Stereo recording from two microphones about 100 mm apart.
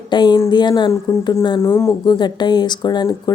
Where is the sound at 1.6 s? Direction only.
25° left (ahead or behind).